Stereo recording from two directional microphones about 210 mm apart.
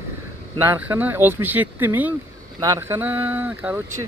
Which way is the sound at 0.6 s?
10° right (ahead or behind).